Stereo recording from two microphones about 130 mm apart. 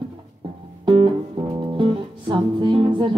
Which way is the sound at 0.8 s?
40° right (ahead or behind).